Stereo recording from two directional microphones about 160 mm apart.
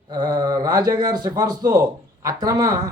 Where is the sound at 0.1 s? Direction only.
25° right (ahead or behind).